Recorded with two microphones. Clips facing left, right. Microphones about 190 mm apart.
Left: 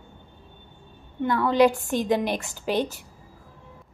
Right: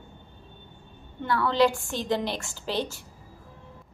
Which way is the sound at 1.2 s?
15° left (ahead or behind).